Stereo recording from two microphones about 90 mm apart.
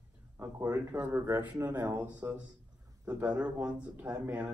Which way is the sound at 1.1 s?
25° right (ahead or behind).